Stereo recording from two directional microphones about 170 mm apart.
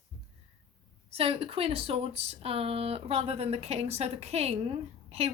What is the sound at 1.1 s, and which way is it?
Speech, 35° right (ahead or behind).